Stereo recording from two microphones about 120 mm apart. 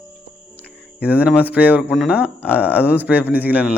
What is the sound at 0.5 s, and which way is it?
Music, 10° right (ahead or behind).